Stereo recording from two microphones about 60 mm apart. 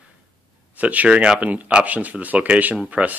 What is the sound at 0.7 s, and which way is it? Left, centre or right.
Speech, right.